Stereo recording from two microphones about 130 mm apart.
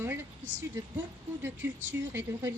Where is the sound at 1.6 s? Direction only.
20° right (ahead or behind).